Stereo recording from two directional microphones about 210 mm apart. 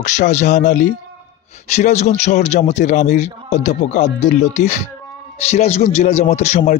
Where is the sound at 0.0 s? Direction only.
35° left (ahead or behind).